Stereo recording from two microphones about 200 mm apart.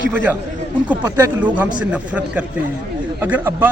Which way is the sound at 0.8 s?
10° right (ahead or behind).